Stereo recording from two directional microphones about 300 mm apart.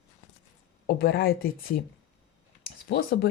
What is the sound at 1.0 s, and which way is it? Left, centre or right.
Speech, left.